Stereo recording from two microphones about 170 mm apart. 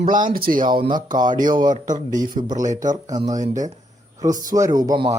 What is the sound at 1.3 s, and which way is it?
A man's voice, 50° right (ahead or behind).